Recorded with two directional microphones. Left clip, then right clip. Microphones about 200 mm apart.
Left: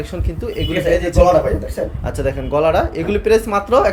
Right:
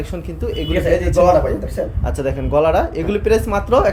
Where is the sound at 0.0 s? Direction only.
Centre (ahead or behind).